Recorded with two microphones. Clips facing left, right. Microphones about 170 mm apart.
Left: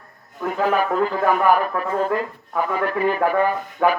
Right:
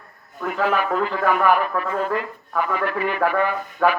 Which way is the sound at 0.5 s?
40° left (ahead or behind).